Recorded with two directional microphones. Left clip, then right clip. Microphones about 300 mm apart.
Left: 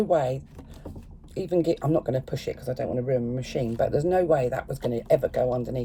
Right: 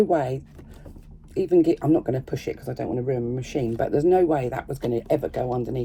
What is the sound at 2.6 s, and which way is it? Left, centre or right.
Speech, centre.